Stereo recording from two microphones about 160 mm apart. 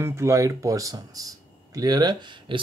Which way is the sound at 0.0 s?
15° right (ahead or behind).